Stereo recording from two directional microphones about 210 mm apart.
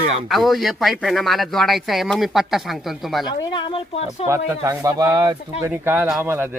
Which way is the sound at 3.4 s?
25° left (ahead or behind).